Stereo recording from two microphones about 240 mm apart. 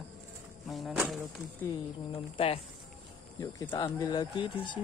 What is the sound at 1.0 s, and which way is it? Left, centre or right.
Speech, centre.